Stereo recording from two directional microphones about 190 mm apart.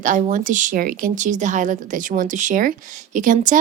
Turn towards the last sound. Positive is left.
turn(degrees=-45)  # may be behind; listen again after turning